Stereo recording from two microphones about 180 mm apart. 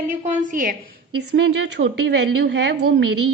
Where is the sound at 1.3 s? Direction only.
75° right (ahead or behind).